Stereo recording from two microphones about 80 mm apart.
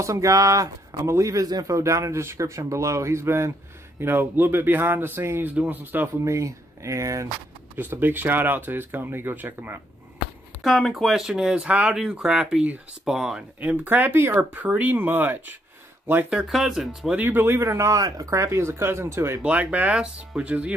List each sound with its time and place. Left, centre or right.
0.0 s speech: right
6.1 s speech: right
7.7 s speech: right
10.6 s speech: centre
13.6 s speech: right
16.3 s speech: centre
17.1 s speech: right
19.4 s speech: centre